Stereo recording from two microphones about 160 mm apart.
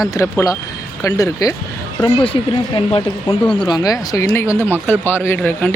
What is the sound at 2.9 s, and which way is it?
A man's voice, 35° left (ahead or behind).